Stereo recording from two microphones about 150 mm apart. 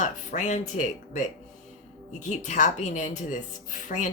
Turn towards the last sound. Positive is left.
turn(degrees=55)  # may be behind; listen again after turning